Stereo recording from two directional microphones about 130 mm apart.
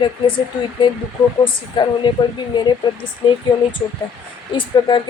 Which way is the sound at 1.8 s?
40° left (ahead or behind).